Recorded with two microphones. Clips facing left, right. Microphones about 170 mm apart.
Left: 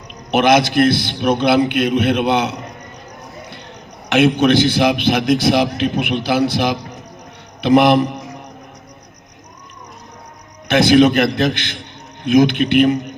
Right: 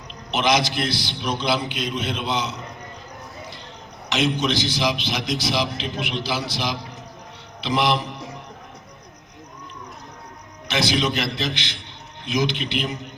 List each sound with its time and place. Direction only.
0.3 s a man's voice: 55° left (ahead or behind)
4.1 s a man's voice: 55° left (ahead or behind)
10.7 s a man's voice: 55° left (ahead or behind)